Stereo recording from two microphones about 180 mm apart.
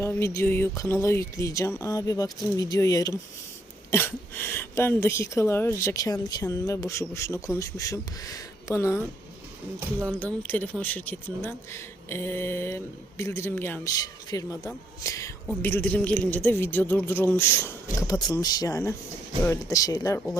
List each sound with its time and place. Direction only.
0.0 s speech: 15° left (ahead or behind)
10.4 s speech: 10° left (ahead or behind)